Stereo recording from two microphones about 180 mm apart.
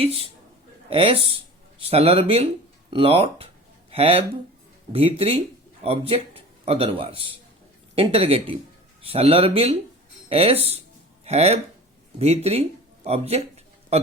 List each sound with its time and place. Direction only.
0.9 s a man's voice: 30° right (ahead or behind)